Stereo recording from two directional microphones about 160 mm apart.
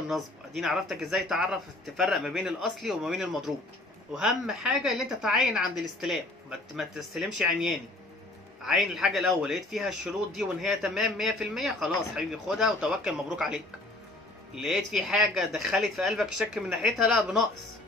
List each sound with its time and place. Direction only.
0.1 s speech: centre (ahead or behind)